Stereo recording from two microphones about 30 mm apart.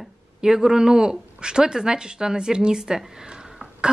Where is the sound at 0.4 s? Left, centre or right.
Centre.